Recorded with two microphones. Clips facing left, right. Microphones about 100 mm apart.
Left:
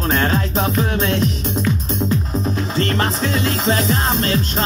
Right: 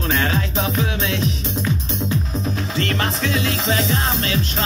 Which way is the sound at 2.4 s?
35° left (ahead or behind).